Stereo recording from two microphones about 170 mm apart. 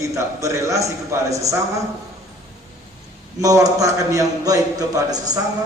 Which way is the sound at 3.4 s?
20° right (ahead or behind).